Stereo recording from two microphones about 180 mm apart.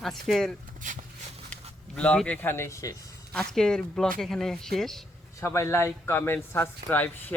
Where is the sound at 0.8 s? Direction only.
45° right (ahead or behind).